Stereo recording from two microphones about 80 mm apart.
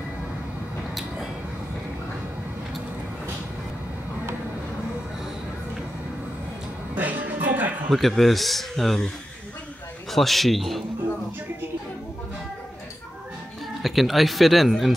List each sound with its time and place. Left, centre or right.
7.0 s music: right
7.9 s speech: centre
10.1 s speech: centre
13.8 s speech: centre